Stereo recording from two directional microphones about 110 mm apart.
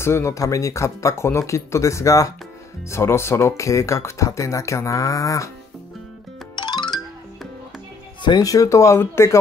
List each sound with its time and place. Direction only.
0.0 s speech: 25° left (ahead or behind)
8.2 s speech: 40° left (ahead or behind)